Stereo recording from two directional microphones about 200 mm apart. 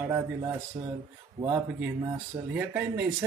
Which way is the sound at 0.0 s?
15° right (ahead or behind).